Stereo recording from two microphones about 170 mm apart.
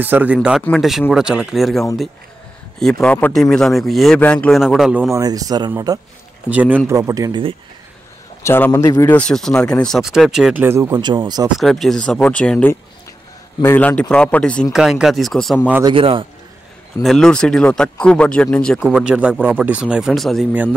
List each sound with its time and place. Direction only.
0.0 s speech: 10° right (ahead or behind)
5.1 s speech: 20° right (ahead or behind)
6.5 s speech: 10° right (ahead or behind)
8.4 s speech: 15° left (ahead or behind)
9.2 s speech: 5° left (ahead or behind); by 11.5 s 25° right (ahead or behind)
11.5 s speech: centre (ahead or behind)
15.8 s a man's voice: 30° right (ahead or behind)
17.0 s speech: 5° left (ahead or behind)